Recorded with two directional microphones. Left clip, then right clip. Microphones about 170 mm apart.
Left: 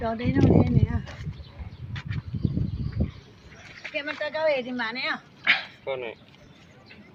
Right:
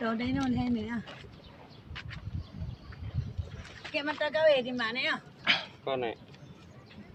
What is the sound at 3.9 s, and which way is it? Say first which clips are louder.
Speech: left 1 dB; 15° left (ahead or behind).